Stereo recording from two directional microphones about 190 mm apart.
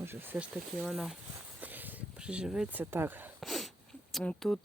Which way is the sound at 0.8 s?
Centre (ahead or behind).